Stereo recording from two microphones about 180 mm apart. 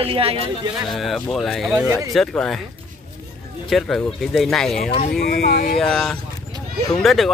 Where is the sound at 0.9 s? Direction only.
Centre (ahead or behind).